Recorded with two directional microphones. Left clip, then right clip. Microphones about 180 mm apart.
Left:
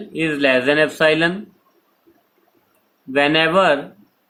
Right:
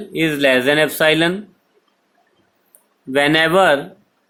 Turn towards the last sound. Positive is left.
turn(degrees=-35)  # may be behind; listen again after turning